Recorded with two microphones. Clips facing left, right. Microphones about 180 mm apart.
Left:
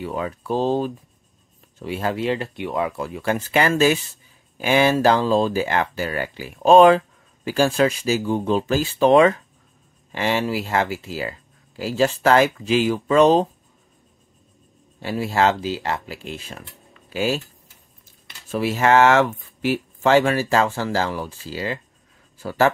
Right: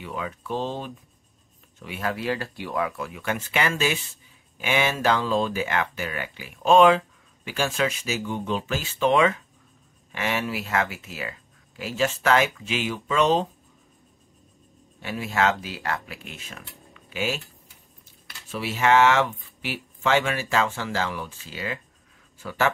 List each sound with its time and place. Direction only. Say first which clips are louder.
0.0 s speech: left 6 dB; 40° left (ahead or behind)
15.0 s speech: left 5 dB; 35° left (ahead or behind)
18.5 s speech: left 4 dB; 40° left (ahead or behind)